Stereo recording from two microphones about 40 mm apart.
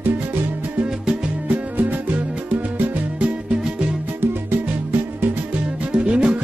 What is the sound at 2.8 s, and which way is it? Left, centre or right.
Music, right.